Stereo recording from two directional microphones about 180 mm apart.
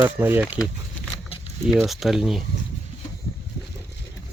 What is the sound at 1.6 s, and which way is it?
Speech, centre (ahead or behind).